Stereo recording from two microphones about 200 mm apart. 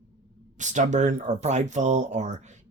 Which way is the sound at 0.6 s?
35° right (ahead or behind).